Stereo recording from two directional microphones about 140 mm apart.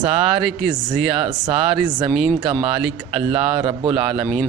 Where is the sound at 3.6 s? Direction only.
35° right (ahead or behind).